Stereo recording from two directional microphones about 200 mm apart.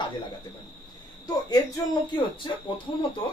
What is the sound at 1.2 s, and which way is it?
Speech, 20° left (ahead or behind).